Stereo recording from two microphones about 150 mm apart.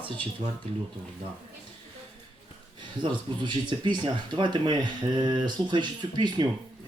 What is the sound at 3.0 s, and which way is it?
Speech, 30° right (ahead or behind).